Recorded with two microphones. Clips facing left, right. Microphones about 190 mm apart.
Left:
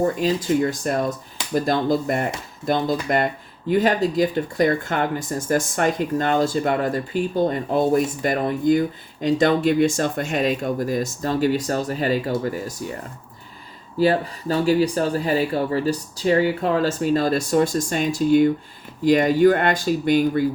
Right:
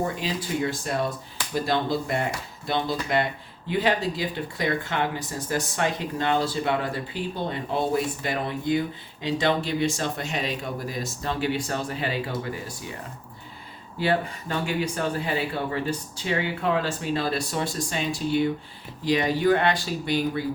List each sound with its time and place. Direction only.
0.0 s speech: 45° left (ahead or behind)
14.0 s speech: 35° left (ahead or behind)